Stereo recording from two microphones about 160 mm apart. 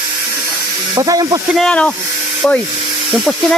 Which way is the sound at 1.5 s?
5° left (ahead or behind).